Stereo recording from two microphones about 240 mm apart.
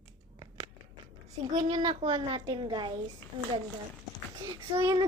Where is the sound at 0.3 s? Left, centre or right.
Centre.